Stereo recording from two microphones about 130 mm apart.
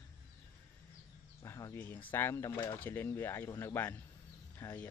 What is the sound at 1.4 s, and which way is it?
Speech, 20° left (ahead or behind).